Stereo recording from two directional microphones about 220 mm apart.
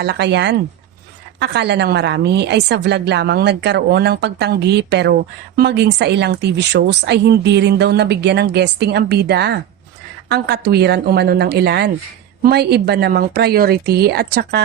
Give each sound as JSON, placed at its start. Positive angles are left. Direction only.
{"t": 0.0, "sound": "speech", "side_deg": -50}